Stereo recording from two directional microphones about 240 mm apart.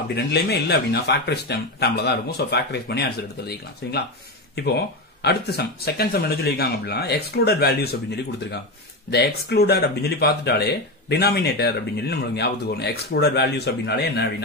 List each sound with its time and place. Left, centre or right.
0.1 s speech: left
9.1 s speech: left